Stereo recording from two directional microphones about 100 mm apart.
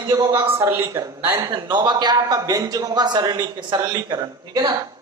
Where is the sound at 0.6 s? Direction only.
25° right (ahead or behind).